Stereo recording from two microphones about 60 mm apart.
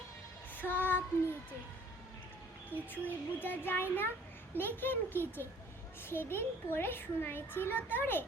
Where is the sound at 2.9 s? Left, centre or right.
Left.